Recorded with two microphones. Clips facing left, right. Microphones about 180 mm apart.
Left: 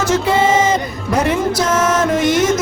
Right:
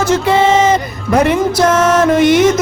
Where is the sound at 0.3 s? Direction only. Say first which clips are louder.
Right 4 dB; 65° right (ahead or behind).